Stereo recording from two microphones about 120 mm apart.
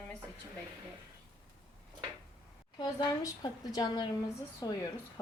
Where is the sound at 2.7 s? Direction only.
35° left (ahead or behind).